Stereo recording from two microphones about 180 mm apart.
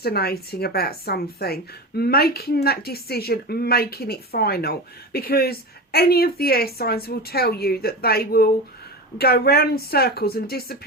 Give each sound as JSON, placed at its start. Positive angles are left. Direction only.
{"t": 0.0, "sound": "speech", "side_deg": 60}